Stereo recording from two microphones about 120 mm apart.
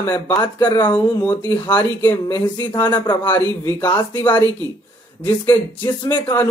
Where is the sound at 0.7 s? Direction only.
40° left (ahead or behind).